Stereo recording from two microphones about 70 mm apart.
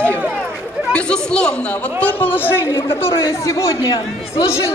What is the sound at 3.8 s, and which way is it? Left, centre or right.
Speech, left.